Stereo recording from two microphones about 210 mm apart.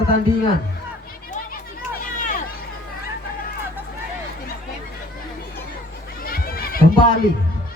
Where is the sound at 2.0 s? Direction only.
40° left (ahead or behind).